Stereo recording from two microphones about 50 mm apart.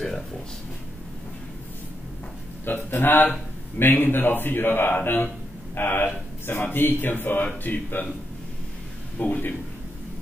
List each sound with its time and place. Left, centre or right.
0.0 s speech: centre
2.6 s speech: left
9.2 s speech: left